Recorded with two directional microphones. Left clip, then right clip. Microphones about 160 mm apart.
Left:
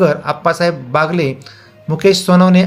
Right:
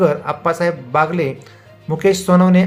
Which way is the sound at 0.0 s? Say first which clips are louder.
Left 3 dB; 15° left (ahead or behind).